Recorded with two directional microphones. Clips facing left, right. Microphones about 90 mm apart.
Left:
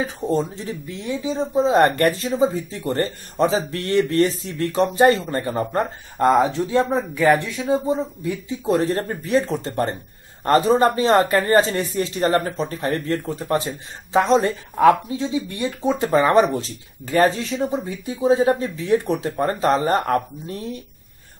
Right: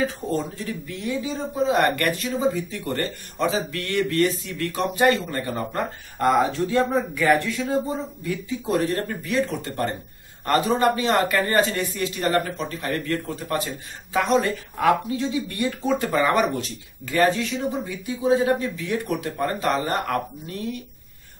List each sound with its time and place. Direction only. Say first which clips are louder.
0.0 s a man's voice: left 3 dB; 25° left (ahead or behind)